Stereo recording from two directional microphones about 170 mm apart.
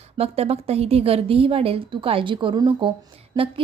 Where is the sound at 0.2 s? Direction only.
35° right (ahead or behind).